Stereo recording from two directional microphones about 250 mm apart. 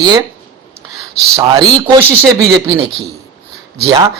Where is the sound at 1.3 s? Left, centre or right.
Centre.